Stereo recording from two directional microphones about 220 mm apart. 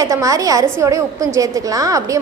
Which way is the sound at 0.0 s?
15° right (ahead or behind).